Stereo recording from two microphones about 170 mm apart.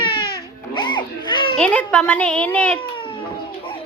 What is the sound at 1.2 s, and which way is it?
Children playing, 25° left (ahead or behind).